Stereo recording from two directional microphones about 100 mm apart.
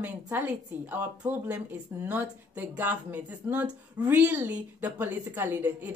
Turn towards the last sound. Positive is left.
turn(degrees=-20)  # may be behind; listen again after turning